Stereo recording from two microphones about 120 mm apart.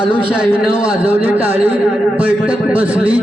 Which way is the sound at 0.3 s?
10° right (ahead or behind).